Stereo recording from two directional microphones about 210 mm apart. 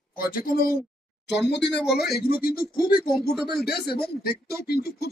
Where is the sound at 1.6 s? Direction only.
5° left (ahead or behind).